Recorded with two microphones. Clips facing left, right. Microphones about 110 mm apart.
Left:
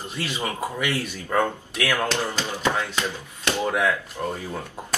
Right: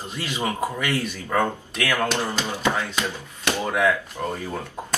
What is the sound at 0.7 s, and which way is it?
Speech, 10° left (ahead or behind).